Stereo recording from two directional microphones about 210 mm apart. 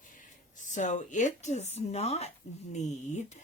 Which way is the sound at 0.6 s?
35° left (ahead or behind).